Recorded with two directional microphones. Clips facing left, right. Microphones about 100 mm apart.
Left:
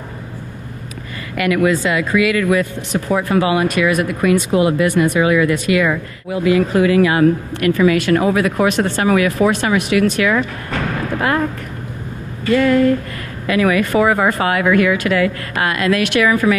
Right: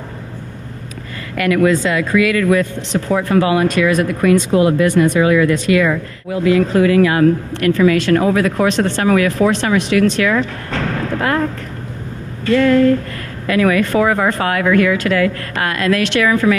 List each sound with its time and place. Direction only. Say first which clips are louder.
1.3 s speech: right 2 dB; 20° left (ahead or behind)
12.4 s speech: right 2 dB; 15° left (ahead or behind)